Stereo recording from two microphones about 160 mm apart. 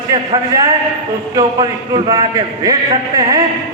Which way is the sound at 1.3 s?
25° right (ahead or behind).